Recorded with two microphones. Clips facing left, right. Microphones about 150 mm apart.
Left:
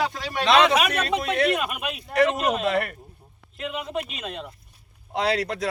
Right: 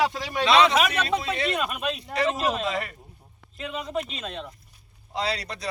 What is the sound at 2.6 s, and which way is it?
Speech, 60° left (ahead or behind).